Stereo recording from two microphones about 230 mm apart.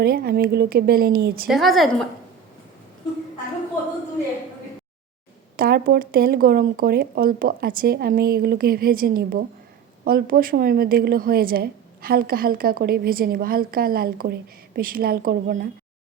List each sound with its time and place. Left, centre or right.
0.0 s a woman's voice: right
1.5 s a woman's voice: centre
5.5 s a woman's voice: right